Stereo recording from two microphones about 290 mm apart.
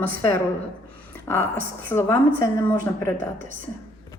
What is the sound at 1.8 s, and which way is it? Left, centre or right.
A woman's voice, centre.